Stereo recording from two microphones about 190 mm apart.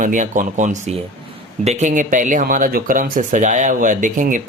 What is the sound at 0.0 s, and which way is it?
Speech, 40° right (ahead or behind).